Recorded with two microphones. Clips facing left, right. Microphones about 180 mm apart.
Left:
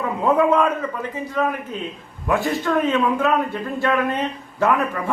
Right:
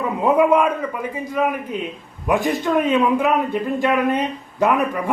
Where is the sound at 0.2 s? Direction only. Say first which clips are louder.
Right 2 dB; 15° right (ahead or behind).